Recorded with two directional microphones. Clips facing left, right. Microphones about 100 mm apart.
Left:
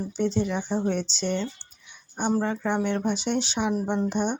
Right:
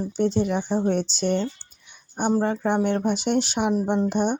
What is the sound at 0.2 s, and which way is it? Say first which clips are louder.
Speech: right 3 dB; 50° right (ahead or behind).